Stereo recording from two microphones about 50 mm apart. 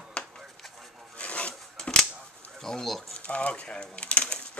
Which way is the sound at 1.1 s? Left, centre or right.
Left.